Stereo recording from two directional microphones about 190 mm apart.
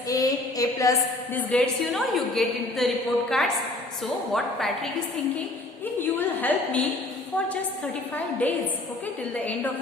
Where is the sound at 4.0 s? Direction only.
Centre (ahead or behind).